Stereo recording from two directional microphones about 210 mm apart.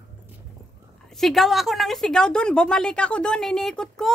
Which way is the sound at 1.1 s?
Centre (ahead or behind).